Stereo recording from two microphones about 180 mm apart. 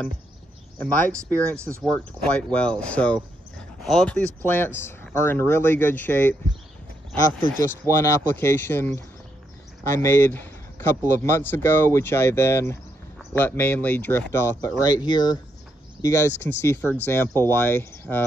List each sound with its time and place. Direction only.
0.7 s speech: 5° left (ahead or behind)
7.6 s speech: 15° left (ahead or behind)
10.0 s speech: 10° left (ahead or behind)